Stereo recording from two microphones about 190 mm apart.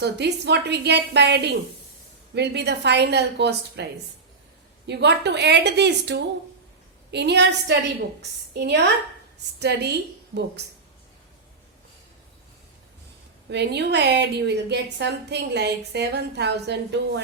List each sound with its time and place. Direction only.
0.0 s a woman's voice: 60° right (ahead or behind)
4.9 s a woman's voice: 65° right (ahead or behind)
13.5 s a woman's voice: 60° right (ahead or behind)